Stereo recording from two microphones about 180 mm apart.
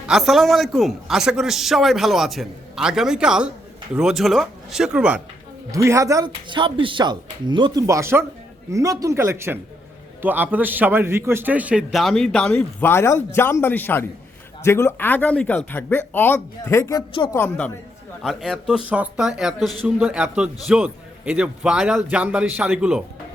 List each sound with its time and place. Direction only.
0.1 s a man's voice: centre (ahead or behind)
5.7 s a man's voice: 15° right (ahead or behind)